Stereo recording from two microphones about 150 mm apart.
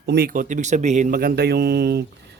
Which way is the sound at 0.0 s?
85° right.